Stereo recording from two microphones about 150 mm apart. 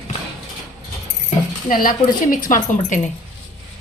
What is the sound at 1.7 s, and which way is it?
A woman's voice, 70° left (ahead or behind).